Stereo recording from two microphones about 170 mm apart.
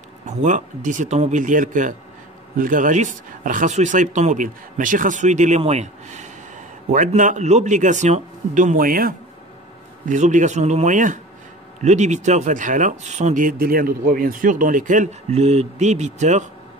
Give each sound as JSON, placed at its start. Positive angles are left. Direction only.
{"t": 0.4, "sound": "speech", "side_deg": -45}
{"t": 10.0, "sound": "speech", "side_deg": -45}